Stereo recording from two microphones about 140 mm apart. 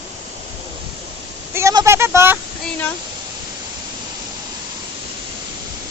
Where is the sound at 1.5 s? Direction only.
20° right (ahead or behind).